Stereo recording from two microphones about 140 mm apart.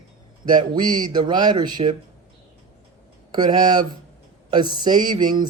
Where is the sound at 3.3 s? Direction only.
30° right (ahead or behind).